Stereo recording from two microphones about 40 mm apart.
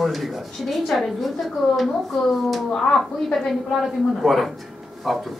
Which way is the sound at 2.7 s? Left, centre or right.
Centre.